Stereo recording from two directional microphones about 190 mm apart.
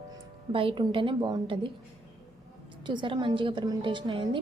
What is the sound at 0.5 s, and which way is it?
A woman's voice, 30° right (ahead or behind).